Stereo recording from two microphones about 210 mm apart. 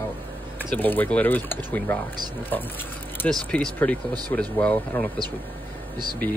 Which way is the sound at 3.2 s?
5° left (ahead or behind).